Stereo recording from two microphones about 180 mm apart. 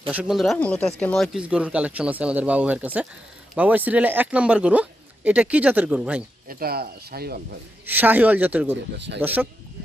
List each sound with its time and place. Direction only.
0.1 s speech: 5° right (ahead or behind)
6.5 s speech: 55° right (ahead or behind)
7.9 s speech: 10° right (ahead or behind)